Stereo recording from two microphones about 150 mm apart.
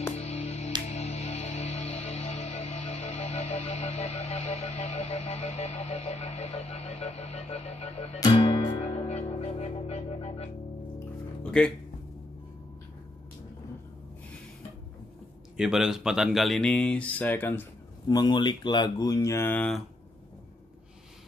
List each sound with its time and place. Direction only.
0.2 s music: 45° left (ahead or behind)
11.6 s speech: 5° left (ahead or behind)
15.5 s speech: 5° right (ahead or behind); by 17.6 s 15° left (ahead or behind)
18.0 s speech: 25° left (ahead or behind)